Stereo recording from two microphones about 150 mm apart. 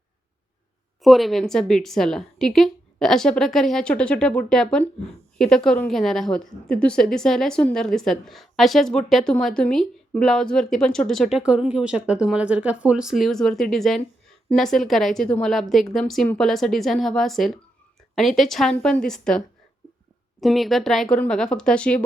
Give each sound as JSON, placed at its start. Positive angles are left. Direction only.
{"t": 1.0, "sound": "a woman's voice", "side_deg": 0}
{"t": 20.4, "sound": "a woman's voice", "side_deg": 0}